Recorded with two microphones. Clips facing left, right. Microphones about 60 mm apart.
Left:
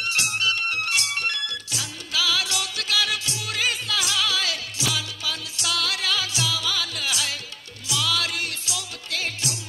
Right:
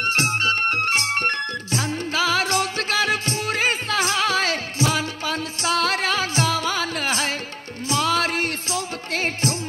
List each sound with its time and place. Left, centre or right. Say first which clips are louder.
0.0 s music: right 4 dB; right